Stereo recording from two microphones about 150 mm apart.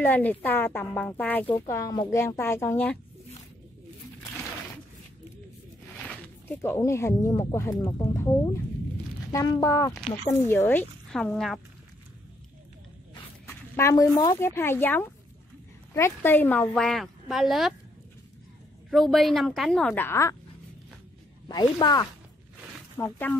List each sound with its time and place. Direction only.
0.0 s speech: 10° left (ahead or behind)
1.7 s speech: 20° left (ahead or behind)
6.0 s speech: 15° left (ahead or behind)
13.7 s speech: 20° left (ahead or behind); by 17.7 s centre (ahead or behind)
18.9 s speech: centre (ahead or behind); by 20.3 s 20° left (ahead or behind)
21.5 s speech: 30° left (ahead or behind)
22.9 s speech: 10° left (ahead or behind)